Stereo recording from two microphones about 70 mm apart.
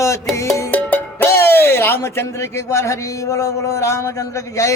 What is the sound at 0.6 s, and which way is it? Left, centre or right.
Music, left.